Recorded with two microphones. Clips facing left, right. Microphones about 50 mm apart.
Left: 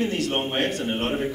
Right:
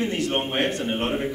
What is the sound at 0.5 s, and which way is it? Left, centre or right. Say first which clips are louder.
Speech: right 1 dB; centre.